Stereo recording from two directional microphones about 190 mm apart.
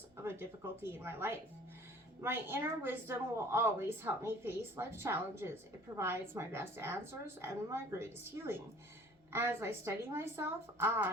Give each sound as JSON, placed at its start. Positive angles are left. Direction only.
{"t": 0.2, "sound": "a woman's voice", "side_deg": -15}